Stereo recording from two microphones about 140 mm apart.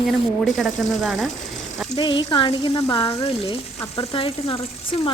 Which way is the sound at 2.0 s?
35° left (ahead or behind).